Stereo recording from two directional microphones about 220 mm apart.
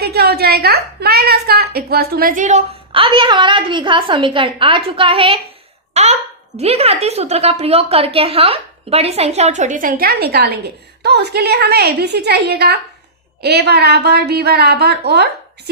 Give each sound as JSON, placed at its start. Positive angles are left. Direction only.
{"t": 0.0, "sound": "a woman's voice", "side_deg": -45}